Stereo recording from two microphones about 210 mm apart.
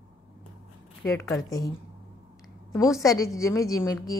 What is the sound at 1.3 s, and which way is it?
Speech, 15° left (ahead or behind).